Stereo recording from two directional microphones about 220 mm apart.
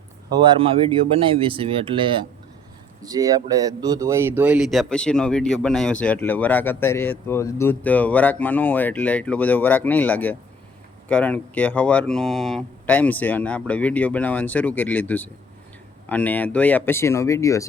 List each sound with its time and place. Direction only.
0.3 s speech: 20° right (ahead or behind); by 17.7 s 15° left (ahead or behind)